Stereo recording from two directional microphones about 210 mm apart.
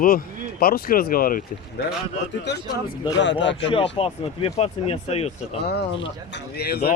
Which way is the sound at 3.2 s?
60° left (ahead or behind).